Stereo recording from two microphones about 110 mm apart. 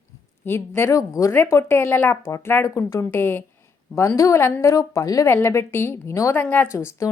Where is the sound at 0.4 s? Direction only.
20° left (ahead or behind).